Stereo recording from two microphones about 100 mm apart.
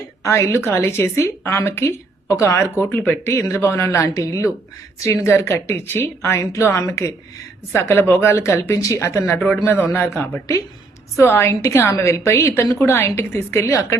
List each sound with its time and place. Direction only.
0.2 s a woman's voice: 30° left (ahead or behind)